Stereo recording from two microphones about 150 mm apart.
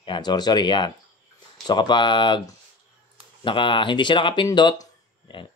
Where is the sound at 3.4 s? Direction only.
35° left (ahead or behind).